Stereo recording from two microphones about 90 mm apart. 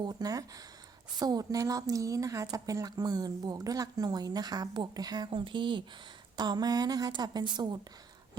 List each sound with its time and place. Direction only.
0.0 s a woman's voice: 45° right (ahead or behind)
6.3 s a woman's voice: 50° right (ahead or behind)